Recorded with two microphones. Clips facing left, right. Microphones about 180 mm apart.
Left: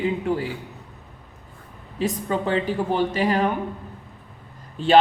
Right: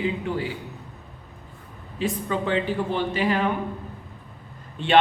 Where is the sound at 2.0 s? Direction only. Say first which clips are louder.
Left 2 dB; 40° left (ahead or behind).